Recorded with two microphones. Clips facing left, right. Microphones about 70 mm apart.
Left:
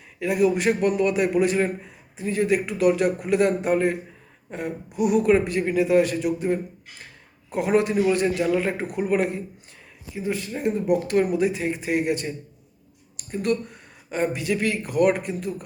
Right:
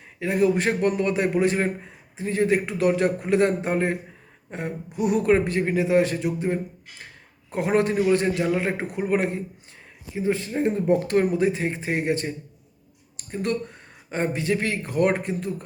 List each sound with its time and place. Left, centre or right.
0.2 s speech: right
13.3 s speech: right